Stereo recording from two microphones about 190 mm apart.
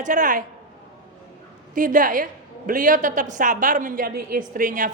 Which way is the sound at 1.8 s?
45° right (ahead or behind).